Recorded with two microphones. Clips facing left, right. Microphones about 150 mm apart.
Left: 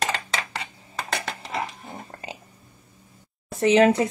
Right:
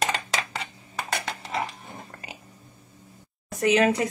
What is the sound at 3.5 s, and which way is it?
Speech, 30° left (ahead or behind).